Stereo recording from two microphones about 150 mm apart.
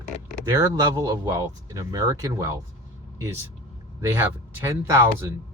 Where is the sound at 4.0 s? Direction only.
15° right (ahead or behind).